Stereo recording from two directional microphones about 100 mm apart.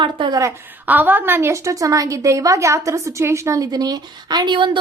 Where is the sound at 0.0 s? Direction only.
55° right (ahead or behind).